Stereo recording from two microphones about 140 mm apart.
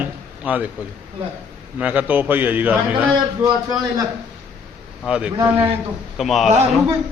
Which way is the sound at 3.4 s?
25° right (ahead or behind).